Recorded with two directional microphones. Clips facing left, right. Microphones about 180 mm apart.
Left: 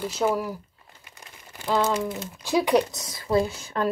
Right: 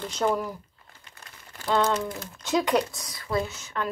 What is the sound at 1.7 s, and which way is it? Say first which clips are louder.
Speech: left 1 dB; 5° left (ahead or behind).